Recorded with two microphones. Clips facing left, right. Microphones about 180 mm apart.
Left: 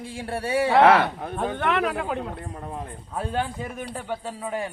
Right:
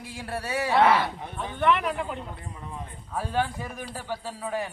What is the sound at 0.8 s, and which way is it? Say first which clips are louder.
Speech: left 4 dB; 80° left.